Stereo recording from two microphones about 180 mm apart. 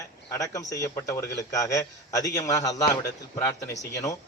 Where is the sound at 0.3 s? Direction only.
20° left (ahead or behind).